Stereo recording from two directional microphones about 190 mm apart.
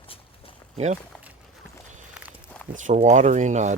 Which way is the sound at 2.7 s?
40° right (ahead or behind).